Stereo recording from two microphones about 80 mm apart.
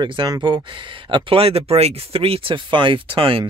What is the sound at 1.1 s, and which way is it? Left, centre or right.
Speech, right.